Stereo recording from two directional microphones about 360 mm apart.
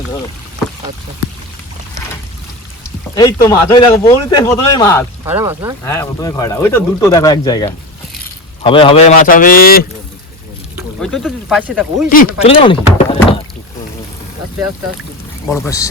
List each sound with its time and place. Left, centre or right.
3.2 s speech: centre
5.2 s speech: centre
5.9 s a man's voice: centre; by 9.8 s left
10.8 s speech: centre
12.4 s speech: centre
15.4 s speech: centre